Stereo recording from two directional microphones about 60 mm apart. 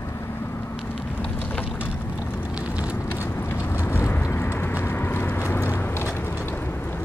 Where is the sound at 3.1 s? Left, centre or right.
Left.